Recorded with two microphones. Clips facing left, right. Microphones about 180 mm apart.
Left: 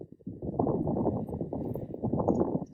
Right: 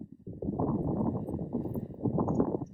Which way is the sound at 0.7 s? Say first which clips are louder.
Left 2 dB; 25° left (ahead or behind).